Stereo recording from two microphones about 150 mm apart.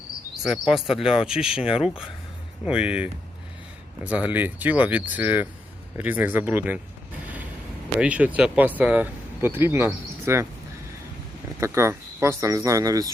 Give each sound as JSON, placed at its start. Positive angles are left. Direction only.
{"t": 0.4, "sound": "speech", "side_deg": -5}
{"t": 7.9, "sound": "speech", "side_deg": -10}
{"t": 11.6, "sound": "speech", "side_deg": -15}